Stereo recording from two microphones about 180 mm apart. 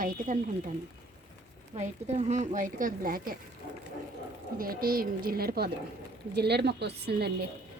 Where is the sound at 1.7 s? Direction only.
35° right (ahead or behind); by 3.3 s 55° right (ahead or behind).